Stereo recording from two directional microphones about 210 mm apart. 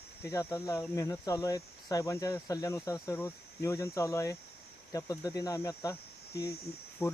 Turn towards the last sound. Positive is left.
turn(degrees=10)  # may be behind; listen again after turning